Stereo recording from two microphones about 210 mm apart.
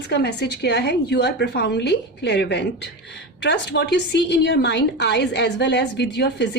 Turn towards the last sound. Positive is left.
turn(degrees=55)  # may be behind; listen again after turning